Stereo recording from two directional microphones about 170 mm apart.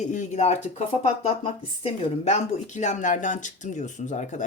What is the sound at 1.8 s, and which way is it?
Speech, 40° left (ahead or behind).